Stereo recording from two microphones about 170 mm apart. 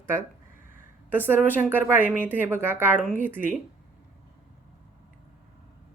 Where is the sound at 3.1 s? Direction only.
10° left (ahead or behind).